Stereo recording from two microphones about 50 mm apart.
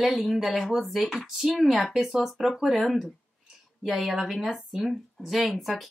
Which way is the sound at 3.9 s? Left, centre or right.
Centre.